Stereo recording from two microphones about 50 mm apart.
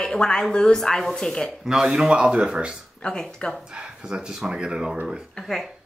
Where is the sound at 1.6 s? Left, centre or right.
Centre.